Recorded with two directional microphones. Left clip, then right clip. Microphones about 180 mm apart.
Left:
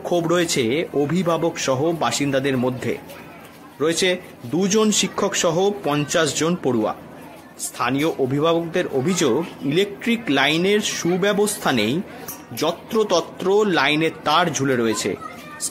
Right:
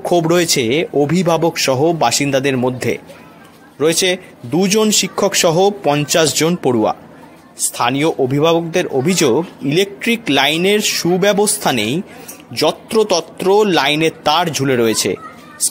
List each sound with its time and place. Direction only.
0.0 s speech: 25° right (ahead or behind)